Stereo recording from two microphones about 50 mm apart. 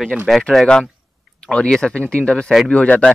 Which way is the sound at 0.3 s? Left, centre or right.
Centre.